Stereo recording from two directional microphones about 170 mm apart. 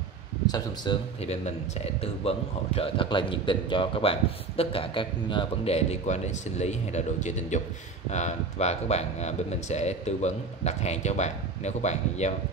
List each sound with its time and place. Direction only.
0.9 s speech: 25° left (ahead or behind)
1.2 s a man's voice: 40° left (ahead or behind)